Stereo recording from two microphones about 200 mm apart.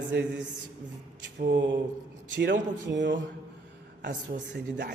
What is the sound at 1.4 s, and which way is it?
A man's voice, 55° right (ahead or behind).